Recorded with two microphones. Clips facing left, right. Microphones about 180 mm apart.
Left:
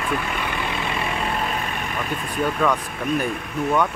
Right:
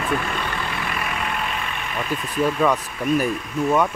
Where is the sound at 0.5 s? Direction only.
20° left (ahead or behind); by 1.8 s 40° left (ahead or behind).